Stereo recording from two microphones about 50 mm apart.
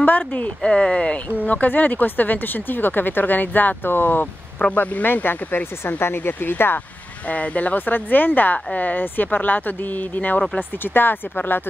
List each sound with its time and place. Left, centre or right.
0.0 s speech: left
0.6 s speech: centre
1.4 s speech: left
7.2 s speech: left